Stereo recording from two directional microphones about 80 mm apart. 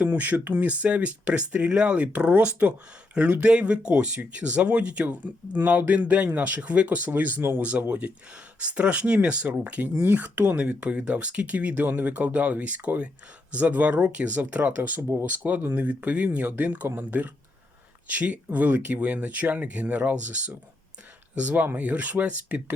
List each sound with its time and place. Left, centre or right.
0.0 s speech: right